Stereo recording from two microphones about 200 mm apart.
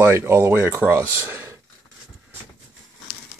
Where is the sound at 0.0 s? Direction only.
10° right (ahead or behind).